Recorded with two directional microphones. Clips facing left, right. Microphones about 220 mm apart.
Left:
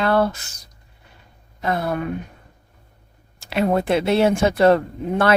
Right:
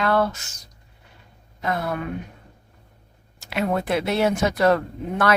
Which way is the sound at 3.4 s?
30° left (ahead or behind).